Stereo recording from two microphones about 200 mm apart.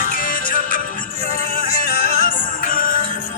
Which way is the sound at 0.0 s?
45° left (ahead or behind).